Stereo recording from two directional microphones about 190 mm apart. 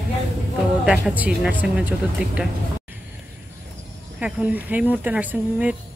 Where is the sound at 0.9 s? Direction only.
5° right (ahead or behind).